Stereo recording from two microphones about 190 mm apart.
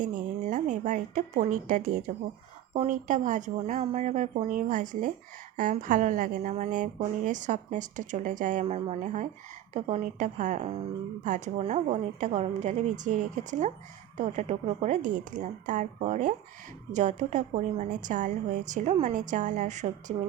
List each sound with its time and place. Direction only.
0.0 s a woman's voice: 45° right (ahead or behind)